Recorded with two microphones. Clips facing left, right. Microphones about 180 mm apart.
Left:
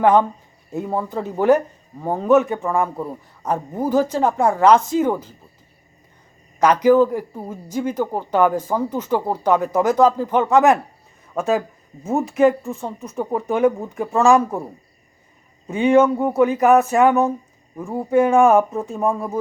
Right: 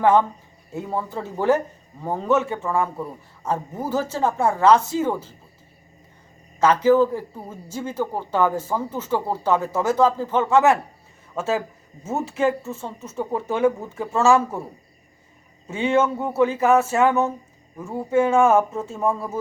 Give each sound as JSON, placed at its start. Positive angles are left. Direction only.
{"t": 0.0, "sound": "speech", "side_deg": 15}
{"t": 6.6, "sound": "speech", "side_deg": 15}
{"t": 12.0, "sound": "speech", "side_deg": 15}
{"t": 15.7, "sound": "speech", "side_deg": 15}